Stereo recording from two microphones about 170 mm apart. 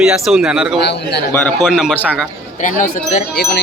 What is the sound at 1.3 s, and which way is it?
Speech, 10° left (ahead or behind).